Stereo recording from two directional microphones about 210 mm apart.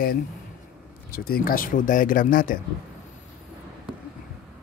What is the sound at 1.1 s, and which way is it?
Speech, 45° left (ahead or behind).